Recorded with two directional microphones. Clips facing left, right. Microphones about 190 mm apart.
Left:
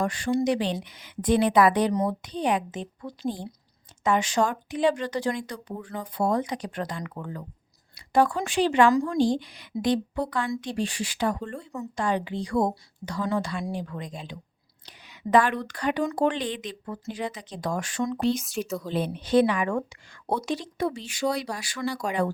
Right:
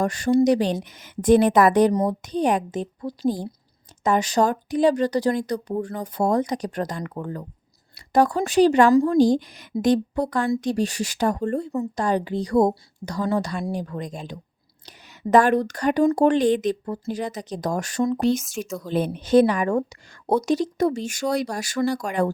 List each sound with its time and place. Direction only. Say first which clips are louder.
0.0 s a woman's voice: right 6 dB; 40° right (ahead or behind)